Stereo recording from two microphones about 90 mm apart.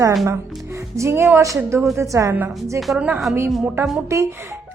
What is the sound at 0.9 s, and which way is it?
Speech, 30° right (ahead or behind).